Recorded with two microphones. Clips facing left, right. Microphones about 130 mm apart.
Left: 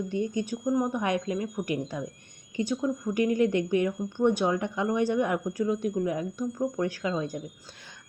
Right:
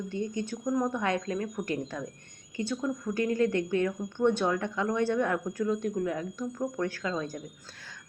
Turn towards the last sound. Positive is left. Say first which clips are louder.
# left 3 dB
turn(degrees=20)  # may be behind; listen again after turning